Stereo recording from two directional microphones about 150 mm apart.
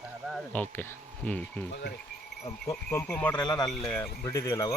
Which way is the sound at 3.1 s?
10° left (ahead or behind).